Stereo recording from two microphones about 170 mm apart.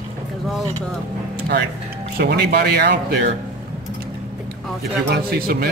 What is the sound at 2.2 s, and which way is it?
Speech, 70° right (ahead or behind).